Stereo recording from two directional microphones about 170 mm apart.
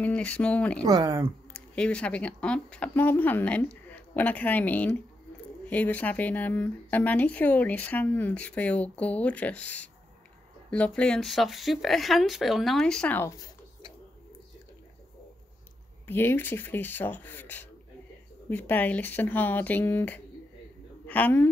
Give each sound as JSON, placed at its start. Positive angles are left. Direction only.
{"t": 0.0, "sound": "speech", "side_deg": 5}
{"t": 0.8, "sound": "speech", "side_deg": -20}
{"t": 1.5, "sound": "speech", "side_deg": 5}
{"t": 16.1, "sound": "speech", "side_deg": 10}